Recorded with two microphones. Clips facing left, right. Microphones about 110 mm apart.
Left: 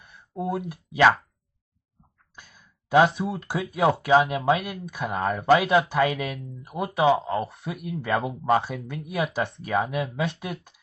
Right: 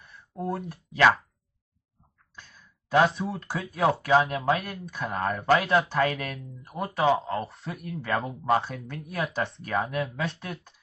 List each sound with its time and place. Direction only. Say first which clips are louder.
0.0 s a sound: left 3 dB; centre (ahead or behind)
2.3 s sigh: even; 10° left (ahead or behind)
3.1 s speech: left 3 dB; centre (ahead or behind)